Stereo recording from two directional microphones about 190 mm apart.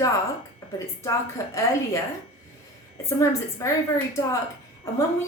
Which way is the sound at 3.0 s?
15° left (ahead or behind).